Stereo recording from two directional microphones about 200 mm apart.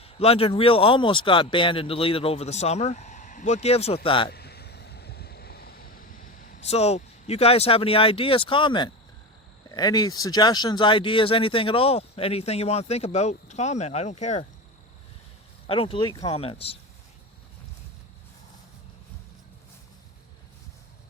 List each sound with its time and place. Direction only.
0.0 s speech: 30° left (ahead or behind)
4.3 s a sound: 55° left (ahead or behind)
6.7 s speech: 30° left (ahead or behind)
15.6 s speech: 30° left (ahead or behind)